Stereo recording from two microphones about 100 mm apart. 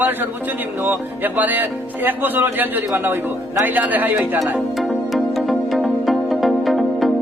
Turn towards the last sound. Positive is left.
turn(degrees=0)  # may be behind; listen again after turning